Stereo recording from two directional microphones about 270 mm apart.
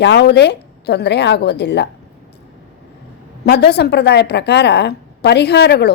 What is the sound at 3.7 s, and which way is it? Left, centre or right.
A woman's voice, left.